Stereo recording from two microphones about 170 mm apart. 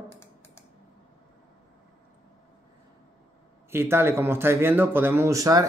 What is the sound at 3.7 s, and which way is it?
A man's voice, 15° right (ahead or behind).